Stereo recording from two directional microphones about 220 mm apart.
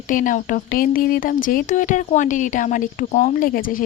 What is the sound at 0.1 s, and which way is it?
A woman's voice, 35° left (ahead or behind).